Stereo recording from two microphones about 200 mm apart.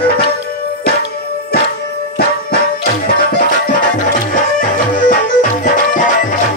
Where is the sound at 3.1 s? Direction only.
45° left (ahead or behind).